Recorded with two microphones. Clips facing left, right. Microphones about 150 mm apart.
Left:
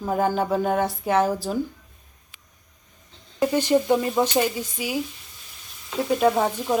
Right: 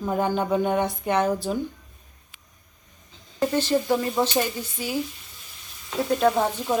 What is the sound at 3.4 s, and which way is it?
Speech, 15° left (ahead or behind).